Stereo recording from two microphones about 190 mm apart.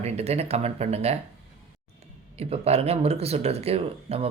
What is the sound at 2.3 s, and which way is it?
Speech, 30° right (ahead or behind).